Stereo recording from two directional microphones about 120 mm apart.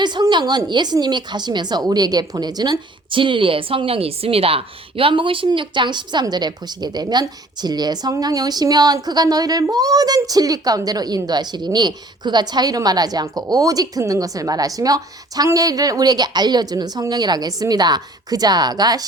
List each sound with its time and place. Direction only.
0.0 s a woman's voice: 40° right (ahead or behind)